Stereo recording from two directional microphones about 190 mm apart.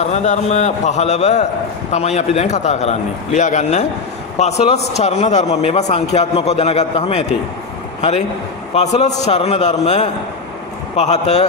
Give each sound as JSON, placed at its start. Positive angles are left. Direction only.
{"t": 0.0, "sound": "a man's voice", "side_deg": 35}
{"t": 8.7, "sound": "a man's voice", "side_deg": 35}